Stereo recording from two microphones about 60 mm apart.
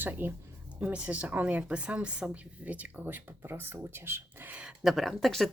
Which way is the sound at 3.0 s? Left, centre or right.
Right.